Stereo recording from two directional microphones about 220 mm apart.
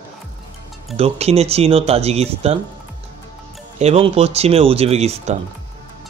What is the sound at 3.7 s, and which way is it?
Speech, 30° right (ahead or behind).